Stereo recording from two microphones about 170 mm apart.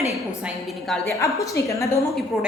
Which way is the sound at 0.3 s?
5° right (ahead or behind).